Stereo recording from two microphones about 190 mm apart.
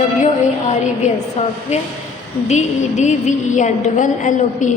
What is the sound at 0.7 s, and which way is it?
A woman's voice, 35° left (ahead or behind).